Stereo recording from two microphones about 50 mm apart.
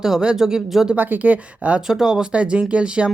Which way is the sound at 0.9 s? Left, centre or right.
Right.